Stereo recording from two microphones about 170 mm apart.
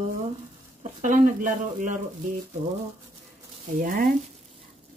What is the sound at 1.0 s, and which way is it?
Speech, 50° right (ahead or behind).